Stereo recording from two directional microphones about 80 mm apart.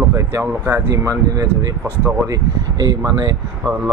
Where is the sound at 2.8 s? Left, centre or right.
Right.